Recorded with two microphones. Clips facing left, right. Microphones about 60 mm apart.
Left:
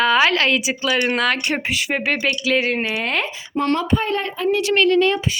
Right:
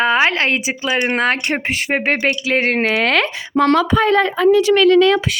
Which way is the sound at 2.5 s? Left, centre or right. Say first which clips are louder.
Right 5 dB; right.